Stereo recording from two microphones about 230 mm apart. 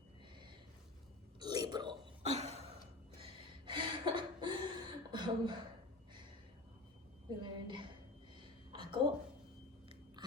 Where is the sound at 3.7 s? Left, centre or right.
Right.